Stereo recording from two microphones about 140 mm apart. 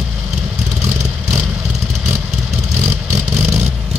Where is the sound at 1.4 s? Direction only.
5° right (ahead or behind).